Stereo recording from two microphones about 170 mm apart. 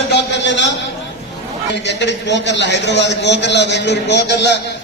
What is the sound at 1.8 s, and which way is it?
A man's voice, 90° left.